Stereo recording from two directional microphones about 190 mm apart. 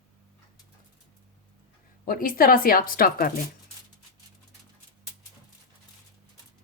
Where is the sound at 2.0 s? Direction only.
50° left (ahead or behind).